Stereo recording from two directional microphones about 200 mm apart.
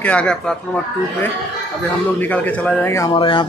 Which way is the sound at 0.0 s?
5° left (ahead or behind).